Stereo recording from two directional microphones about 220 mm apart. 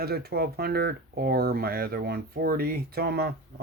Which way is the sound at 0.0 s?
45° right (ahead or behind).